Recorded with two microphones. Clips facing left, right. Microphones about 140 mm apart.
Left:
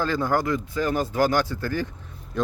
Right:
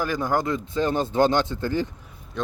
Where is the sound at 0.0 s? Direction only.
15° right (ahead or behind).